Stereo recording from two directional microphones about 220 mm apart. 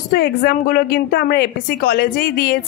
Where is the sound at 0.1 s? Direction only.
45° left (ahead or behind).